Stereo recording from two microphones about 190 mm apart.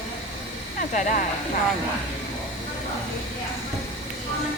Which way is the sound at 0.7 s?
45° left (ahead or behind).